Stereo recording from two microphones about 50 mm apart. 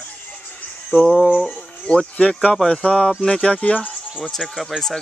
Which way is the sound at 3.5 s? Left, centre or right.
Left.